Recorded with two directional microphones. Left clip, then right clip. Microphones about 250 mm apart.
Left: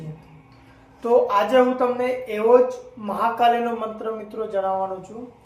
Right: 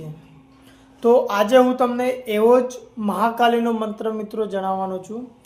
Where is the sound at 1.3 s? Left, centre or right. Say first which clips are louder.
Right 2 dB; right.